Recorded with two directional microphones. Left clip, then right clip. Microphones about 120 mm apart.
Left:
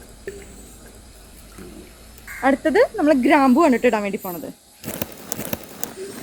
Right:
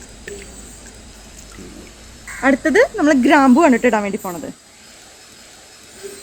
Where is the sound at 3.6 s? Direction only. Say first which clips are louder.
Right 3 dB; 15° right (ahead or behind).